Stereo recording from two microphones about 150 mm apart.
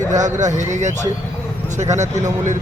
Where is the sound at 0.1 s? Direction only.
55° right (ahead or behind).